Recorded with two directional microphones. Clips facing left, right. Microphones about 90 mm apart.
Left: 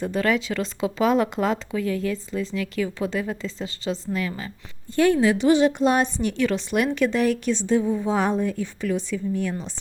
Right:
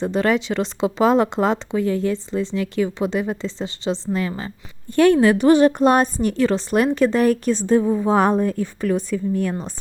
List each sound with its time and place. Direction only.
0.0 s speech: 30° right (ahead or behind)
4.9 s a woman's voice: 65° right (ahead or behind); by 9.7 s 45° right (ahead or behind)